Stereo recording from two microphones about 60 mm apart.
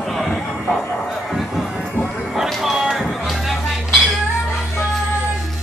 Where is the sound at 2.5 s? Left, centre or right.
Centre.